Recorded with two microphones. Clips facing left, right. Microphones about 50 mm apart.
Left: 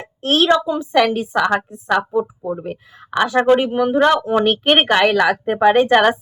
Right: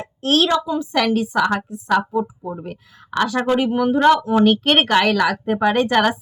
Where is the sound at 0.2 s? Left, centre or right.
Centre.